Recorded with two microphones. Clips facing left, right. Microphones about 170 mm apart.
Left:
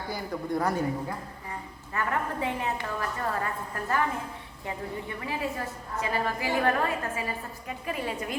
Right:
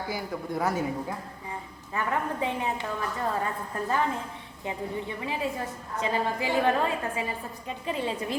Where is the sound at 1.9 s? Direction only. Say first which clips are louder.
Right 1 dB; 15° right (ahead or behind).